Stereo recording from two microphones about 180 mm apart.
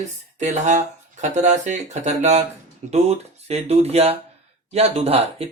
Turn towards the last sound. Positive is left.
turn(degrees=-35)  # may be behind; listen again after turning